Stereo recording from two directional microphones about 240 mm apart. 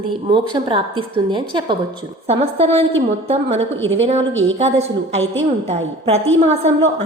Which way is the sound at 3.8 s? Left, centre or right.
Right.